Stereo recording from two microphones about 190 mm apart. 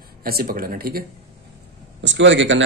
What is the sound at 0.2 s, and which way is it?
Speech, 50° right (ahead or behind).